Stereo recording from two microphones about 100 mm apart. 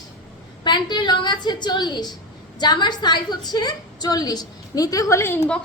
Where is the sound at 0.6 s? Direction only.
50° left (ahead or behind); by 5.4 s 30° left (ahead or behind).